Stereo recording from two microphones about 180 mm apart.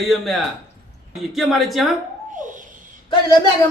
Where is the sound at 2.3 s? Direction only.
45° right (ahead or behind).